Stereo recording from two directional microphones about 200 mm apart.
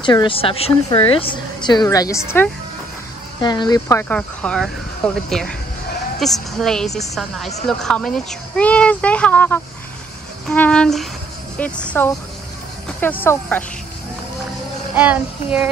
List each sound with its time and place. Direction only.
0.0 s a woman's voice: 25° left (ahead or behind)
4.1 s speech: 5° left (ahead or behind)
15.0 s speech: 5° right (ahead or behind)